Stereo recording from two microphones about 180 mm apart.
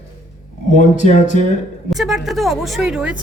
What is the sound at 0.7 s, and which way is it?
Speech, 40° left (ahead or behind).